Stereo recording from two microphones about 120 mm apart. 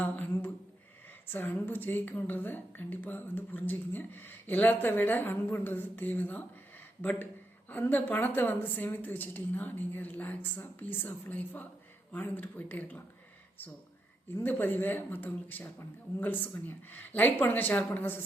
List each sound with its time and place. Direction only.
0.0 s a woman's voice: 15° left (ahead or behind)
14.3 s a woman's voice: 15° left (ahead or behind)